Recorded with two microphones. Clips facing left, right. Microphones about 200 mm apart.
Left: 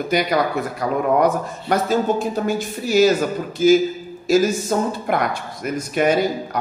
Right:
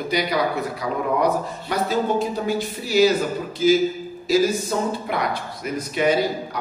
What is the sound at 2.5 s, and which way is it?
Speech, 50° left (ahead or behind).